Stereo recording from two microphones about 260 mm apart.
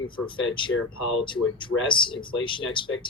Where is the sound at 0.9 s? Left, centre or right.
Left.